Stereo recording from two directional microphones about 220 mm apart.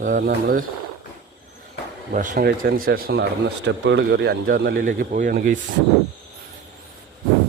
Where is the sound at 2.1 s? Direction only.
40° right (ahead or behind).